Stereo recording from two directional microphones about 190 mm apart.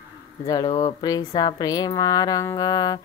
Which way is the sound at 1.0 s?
20° left (ahead or behind).